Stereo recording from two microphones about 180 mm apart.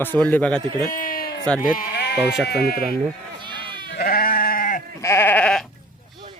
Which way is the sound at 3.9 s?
55° left (ahead or behind).